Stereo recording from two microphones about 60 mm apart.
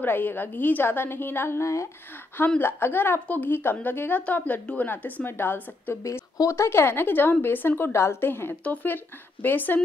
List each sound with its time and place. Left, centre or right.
0.0 s a woman's voice: left
2.6 s a woman's voice: left
6.5 s a woman's voice: left